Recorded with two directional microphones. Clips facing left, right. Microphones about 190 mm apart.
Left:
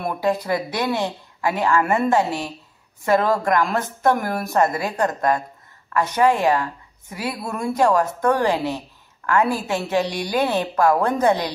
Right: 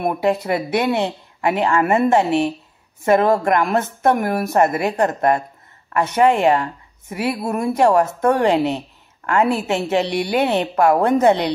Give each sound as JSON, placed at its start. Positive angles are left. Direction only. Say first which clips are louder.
{"t": 0.0, "sound": "a woman's voice", "louder": "right 3 dB", "side_deg": -25}